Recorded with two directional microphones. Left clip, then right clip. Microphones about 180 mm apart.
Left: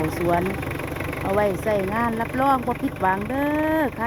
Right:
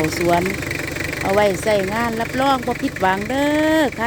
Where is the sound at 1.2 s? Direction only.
15° right (ahead or behind).